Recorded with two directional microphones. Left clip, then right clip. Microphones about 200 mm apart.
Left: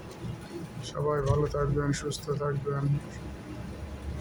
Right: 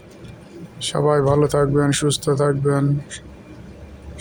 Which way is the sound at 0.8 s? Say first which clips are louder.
Right 12 dB; 35° right (ahead or behind).